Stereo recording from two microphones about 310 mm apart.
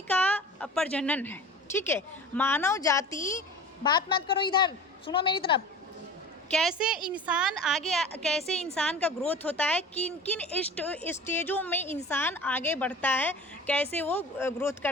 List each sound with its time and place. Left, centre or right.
0.1 s a woman's voice: centre
6.5 s a woman's voice: centre